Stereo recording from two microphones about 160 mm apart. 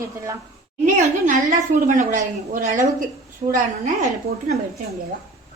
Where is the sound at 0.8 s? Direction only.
50° right (ahead or behind).